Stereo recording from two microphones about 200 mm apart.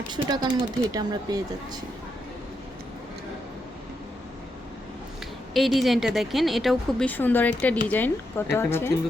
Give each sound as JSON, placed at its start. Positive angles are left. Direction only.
{"t": 0.1, "sound": "speech", "side_deg": -20}
{"t": 5.5, "sound": "a woman's voice", "side_deg": 0}